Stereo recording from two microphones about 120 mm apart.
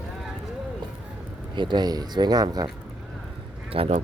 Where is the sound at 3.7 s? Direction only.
50° right (ahead or behind).